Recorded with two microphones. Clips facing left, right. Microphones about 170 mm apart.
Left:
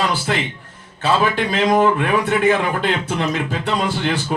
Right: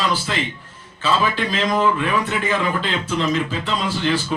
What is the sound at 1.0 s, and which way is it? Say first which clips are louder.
A man's voice: left 3 dB; 60° left (ahead or behind).